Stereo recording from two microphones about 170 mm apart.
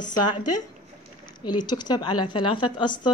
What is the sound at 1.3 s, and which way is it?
A woman's voice, 25° left (ahead or behind).